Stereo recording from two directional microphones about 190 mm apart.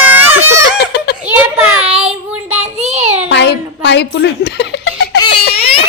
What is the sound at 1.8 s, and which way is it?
Child singing, 30° right (ahead or behind).